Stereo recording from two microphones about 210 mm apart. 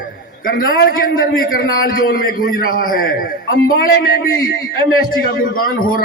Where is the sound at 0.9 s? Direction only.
45° left (ahead or behind).